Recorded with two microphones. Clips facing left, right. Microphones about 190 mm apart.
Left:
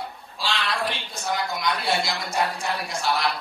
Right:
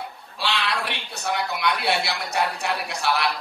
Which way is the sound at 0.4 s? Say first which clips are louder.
Right 1 dB; 65° right (ahead or behind).